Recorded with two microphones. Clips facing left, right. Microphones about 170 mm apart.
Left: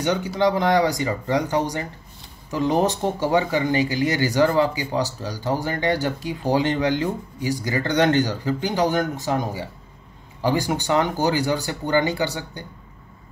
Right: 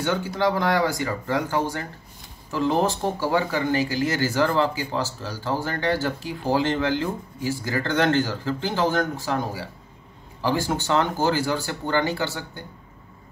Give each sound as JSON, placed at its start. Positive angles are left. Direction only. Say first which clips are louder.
{"t": 0.0, "sound": "speech", "louder": "left 3 dB", "side_deg": 15}